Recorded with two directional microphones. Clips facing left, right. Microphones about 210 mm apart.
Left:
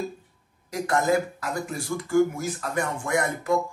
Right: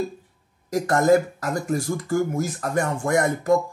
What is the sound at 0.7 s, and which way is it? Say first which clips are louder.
Speech: right 6 dB; 45° right (ahead or behind).